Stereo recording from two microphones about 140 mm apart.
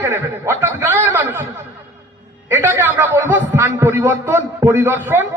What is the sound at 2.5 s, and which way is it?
A man's voice, 20° right (ahead or behind).